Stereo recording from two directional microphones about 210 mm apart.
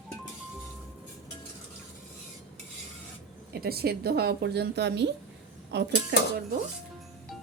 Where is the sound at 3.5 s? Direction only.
45° right (ahead or behind).